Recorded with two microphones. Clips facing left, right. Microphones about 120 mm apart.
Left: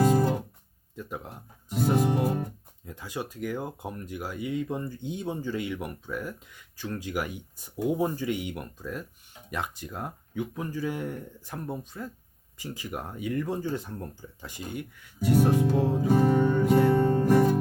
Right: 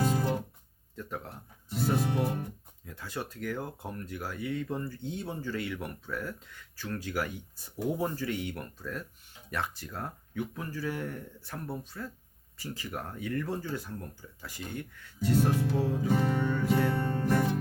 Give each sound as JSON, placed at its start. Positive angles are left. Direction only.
{"t": 0.1, "sound": "guitar", "side_deg": 45}
{"t": 0.9, "sound": "speech", "side_deg": 15}
{"t": 2.0, "sound": "music", "side_deg": 40}
{"t": 2.8, "sound": "speech", "side_deg": 15}
{"t": 15.7, "sound": "music", "side_deg": 30}
{"t": 16.0, "sound": "music", "side_deg": 45}
{"t": 16.3, "sound": "music", "side_deg": 20}